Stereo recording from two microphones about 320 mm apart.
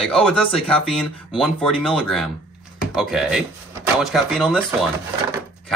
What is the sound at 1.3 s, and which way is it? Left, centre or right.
Speech, centre.